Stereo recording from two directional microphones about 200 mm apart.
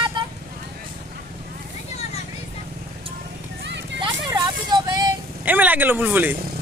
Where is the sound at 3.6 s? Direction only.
60° right (ahead or behind).